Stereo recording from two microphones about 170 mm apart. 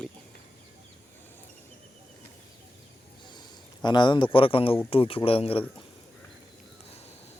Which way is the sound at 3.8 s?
25° left (ahead or behind).